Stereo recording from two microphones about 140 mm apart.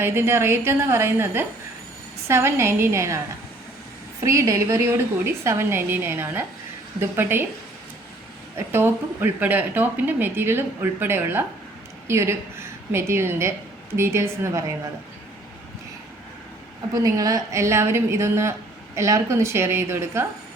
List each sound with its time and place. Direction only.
0.0 s a woman's voice: 15° right (ahead or behind)
4.2 s a woman's voice: 20° right (ahead or behind)
8.5 s a woman's voice: 15° right (ahead or behind)
16.9 s a woman's voice: 25° right (ahead or behind)